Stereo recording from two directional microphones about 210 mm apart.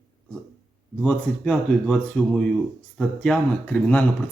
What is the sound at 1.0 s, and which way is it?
A man's voice, 5° left (ahead or behind).